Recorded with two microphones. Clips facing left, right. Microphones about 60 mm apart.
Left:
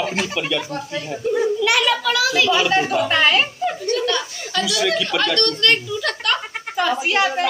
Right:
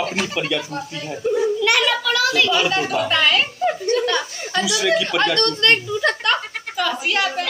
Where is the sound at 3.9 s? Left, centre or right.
Right.